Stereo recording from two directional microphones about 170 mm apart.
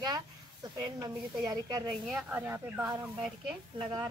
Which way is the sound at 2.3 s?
10° right (ahead or behind).